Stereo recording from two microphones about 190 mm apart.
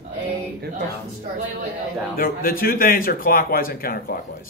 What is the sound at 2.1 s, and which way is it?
A man's voice, 50° left (ahead or behind).